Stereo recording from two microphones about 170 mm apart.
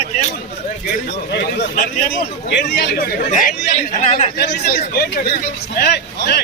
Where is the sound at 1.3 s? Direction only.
65° left (ahead or behind).